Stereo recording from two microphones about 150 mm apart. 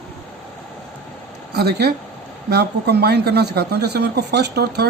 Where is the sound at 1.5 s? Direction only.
90° right.